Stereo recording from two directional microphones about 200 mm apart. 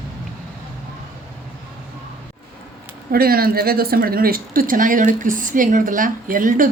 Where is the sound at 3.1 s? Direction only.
50° right (ahead or behind).